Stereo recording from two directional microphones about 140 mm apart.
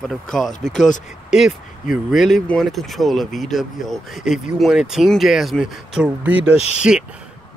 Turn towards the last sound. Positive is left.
turn(degrees=50)  # may be behind; listen again after turning